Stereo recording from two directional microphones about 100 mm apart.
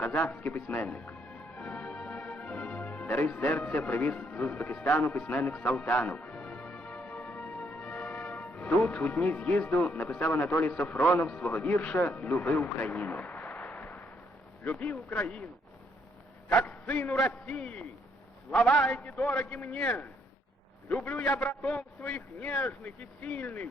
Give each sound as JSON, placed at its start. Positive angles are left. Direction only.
{"t": 0.0, "sound": "a man's voice", "side_deg": 15}
{"t": 12.9, "sound": "a sound", "side_deg": 15}
{"t": 14.6, "sound": "a man's voice", "side_deg": 15}
{"t": 16.6, "sound": "a man's voice", "side_deg": 15}